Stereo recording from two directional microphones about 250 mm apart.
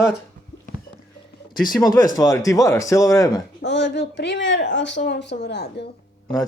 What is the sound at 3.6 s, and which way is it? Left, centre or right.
Speech, left.